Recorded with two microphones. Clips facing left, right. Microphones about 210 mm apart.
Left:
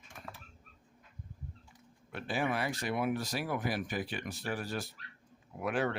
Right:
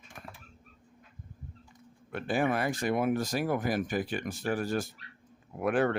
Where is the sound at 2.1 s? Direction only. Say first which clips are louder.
Right 5 dB; 50° right (ahead or behind).